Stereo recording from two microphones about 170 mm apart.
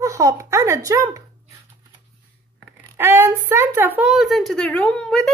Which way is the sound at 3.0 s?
15° right (ahead or behind).